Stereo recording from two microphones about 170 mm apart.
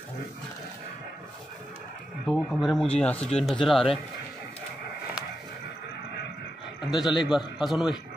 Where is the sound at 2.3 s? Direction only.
Centre (ahead or behind).